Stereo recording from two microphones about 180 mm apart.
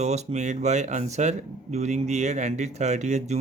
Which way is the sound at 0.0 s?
40° right (ahead or behind).